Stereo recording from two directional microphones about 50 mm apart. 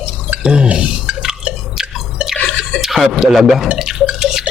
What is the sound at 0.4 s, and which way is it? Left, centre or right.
Speech, centre.